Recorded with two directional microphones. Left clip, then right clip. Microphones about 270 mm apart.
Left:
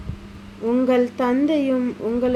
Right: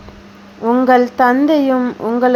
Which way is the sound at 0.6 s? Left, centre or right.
Centre.